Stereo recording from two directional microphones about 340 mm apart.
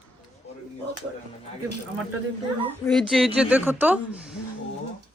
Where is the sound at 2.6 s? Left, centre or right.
Centre.